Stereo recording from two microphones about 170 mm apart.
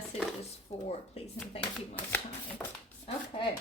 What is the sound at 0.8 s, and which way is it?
Speech, 40° left (ahead or behind).